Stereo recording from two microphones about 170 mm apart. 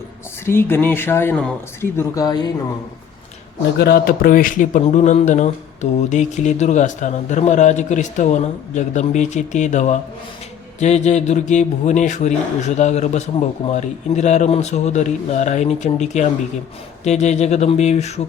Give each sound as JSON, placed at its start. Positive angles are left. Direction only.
{"t": 0.4, "sound": "speech", "side_deg": 15}
{"t": 3.8, "sound": "speech", "side_deg": 65}